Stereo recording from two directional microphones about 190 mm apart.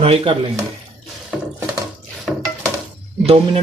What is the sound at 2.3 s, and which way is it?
Stir, centre (ahead or behind).